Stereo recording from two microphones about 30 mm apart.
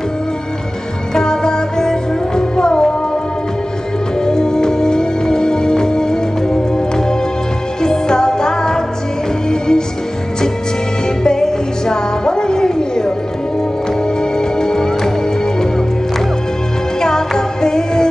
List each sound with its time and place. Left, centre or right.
1.1 s music: left
4.2 s music: left
7.8 s music: left
11.2 s music: centre
14.4 s music: left
17.0 s music: left